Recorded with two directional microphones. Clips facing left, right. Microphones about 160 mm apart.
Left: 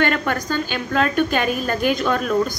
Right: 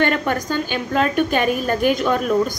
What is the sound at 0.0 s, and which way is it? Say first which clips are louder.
A woman's voice: right 1 dB; 15° right (ahead or behind).